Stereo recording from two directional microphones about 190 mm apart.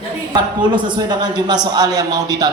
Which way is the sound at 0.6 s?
25° right (ahead or behind).